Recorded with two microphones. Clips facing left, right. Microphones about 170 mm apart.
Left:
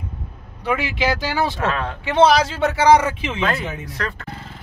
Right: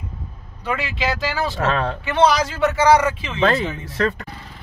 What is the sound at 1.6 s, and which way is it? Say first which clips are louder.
Speech: right 2 dB; 35° right (ahead or behind).